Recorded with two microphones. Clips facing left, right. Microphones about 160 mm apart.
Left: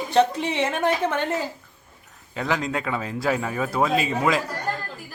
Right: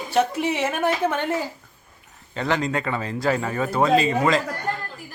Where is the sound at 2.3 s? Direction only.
Centre (ahead or behind).